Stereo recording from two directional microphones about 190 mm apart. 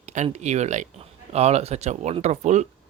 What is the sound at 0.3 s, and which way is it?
Speech, 35° right (ahead or behind).